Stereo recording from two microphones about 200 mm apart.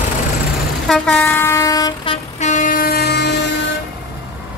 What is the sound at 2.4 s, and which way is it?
Train, 40° left (ahead or behind).